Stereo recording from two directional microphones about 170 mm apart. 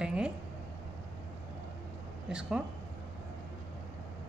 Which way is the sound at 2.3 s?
5° right (ahead or behind).